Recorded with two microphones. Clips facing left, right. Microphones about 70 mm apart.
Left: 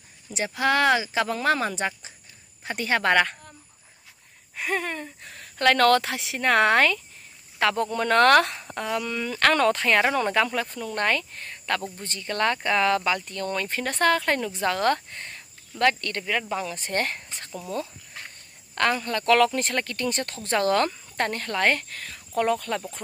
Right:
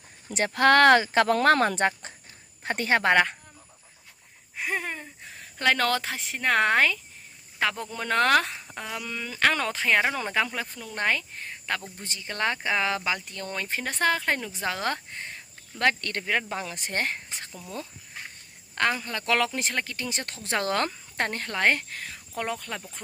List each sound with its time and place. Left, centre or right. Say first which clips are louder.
0.3 s speech: right 4 dB; right
2.6 s speech: right 1 dB; right; by 3.3 s centre
4.6 s a sound: left 3 dB; centre
5.0 s speech: left 3 dB; centre
15.8 s speech: left 2 dB; right
17.5 s speech: left 8 dB; left
18.8 s speech: left 3 dB; centre
19.6 s speech: left 4 dB; centre
20.4 s speech: left 4 dB; right
22.4 s speech: left 8 dB; centre